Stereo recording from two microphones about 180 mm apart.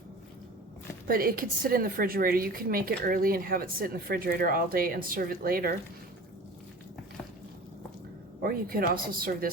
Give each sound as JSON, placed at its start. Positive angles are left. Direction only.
{"t": 1.0, "sound": "a woman's voice", "side_deg": -55}
{"t": 8.4, "sound": "a woman's voice", "side_deg": -55}